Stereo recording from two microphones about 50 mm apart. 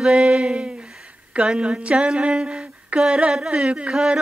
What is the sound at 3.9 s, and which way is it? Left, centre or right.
Mantra, centre.